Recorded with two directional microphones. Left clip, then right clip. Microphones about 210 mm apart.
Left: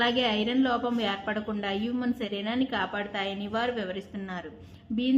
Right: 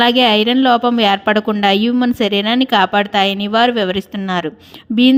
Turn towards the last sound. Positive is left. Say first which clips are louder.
# right 15 dB
turn(degrees=-50)  # may be behind; listen again after turning